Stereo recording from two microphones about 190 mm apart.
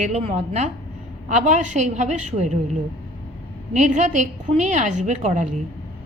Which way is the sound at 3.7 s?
40° right (ahead or behind).